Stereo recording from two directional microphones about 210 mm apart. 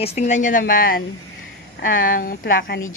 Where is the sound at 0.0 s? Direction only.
30° left (ahead or behind); by 2.8 s 50° left (ahead or behind).